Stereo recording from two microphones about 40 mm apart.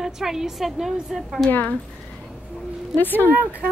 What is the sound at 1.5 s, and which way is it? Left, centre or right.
Speech, left.